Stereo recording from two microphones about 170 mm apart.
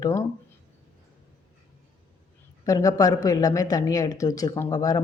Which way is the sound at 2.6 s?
20° left (ahead or behind).